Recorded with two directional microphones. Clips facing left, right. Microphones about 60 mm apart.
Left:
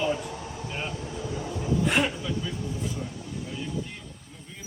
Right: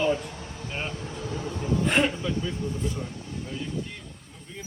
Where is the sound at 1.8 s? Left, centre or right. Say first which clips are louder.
Right 3 dB; centre.